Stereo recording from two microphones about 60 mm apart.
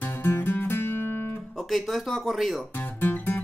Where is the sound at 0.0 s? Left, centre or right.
Left.